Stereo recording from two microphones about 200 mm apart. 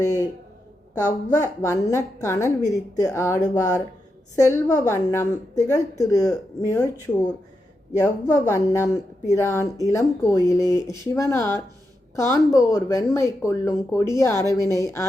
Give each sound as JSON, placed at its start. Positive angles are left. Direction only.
{"t": 0.0, "sound": "a man's voice", "side_deg": 15}
{"t": 7.9, "sound": "speech", "side_deg": 15}